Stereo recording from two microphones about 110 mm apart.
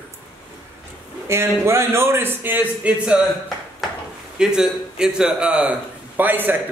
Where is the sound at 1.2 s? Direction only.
25° right (ahead or behind).